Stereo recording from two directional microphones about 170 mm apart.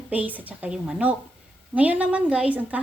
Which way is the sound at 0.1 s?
10° right (ahead or behind).